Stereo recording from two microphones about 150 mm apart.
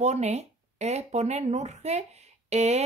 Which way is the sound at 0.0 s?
50° right (ahead or behind).